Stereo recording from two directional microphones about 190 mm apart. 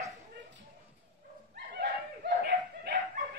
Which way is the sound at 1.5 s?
60° right (ahead or behind).